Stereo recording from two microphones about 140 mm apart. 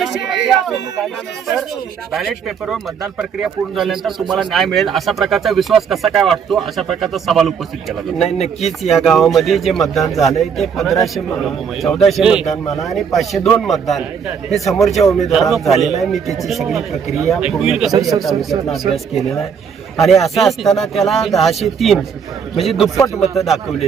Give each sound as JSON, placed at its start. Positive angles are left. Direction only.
{"t": 0.0, "sound": "speech", "side_deg": 0}
{"t": 2.1, "sound": "speech", "side_deg": 0}
{"t": 8.3, "sound": "speech", "side_deg": 50}
{"t": 8.9, "sound": "speech", "side_deg": 0}
{"t": 20.2, "sound": "speech", "side_deg": 0}